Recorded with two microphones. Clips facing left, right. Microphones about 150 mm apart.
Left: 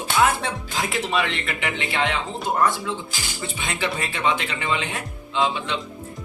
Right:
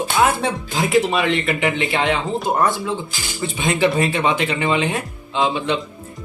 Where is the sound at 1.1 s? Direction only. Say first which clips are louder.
Right 6 dB; 15° right (ahead or behind).